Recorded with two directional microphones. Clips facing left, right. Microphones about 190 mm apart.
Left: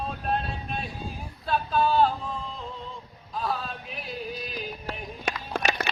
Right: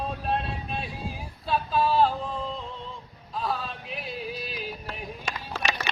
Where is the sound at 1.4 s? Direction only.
Centre (ahead or behind).